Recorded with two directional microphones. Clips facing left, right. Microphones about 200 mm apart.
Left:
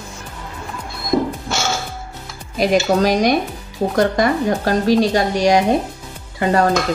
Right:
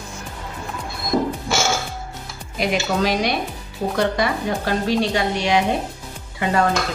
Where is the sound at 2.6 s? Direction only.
40° left (ahead or behind).